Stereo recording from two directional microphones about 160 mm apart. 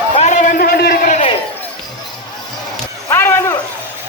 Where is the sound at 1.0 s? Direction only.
40° left (ahead or behind).